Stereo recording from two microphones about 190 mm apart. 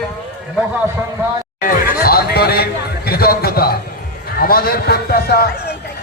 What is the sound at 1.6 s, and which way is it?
A man's voice, 50° left (ahead or behind).